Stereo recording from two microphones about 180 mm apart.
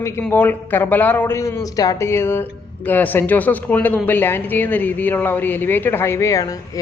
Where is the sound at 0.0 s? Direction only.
10° left (ahead or behind).